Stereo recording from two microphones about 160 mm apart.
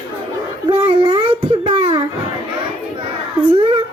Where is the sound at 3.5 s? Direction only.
30° right (ahead or behind).